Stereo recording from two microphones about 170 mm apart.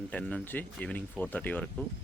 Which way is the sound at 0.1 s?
5° left (ahead or behind).